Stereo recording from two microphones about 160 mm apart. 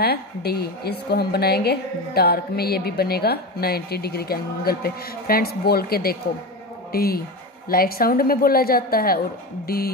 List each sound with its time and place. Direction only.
0.0 s a woman's voice: 80° left